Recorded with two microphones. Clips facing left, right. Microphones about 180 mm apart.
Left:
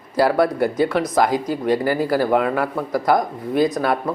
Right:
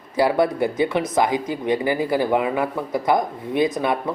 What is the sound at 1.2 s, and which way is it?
Speech, 45° left (ahead or behind).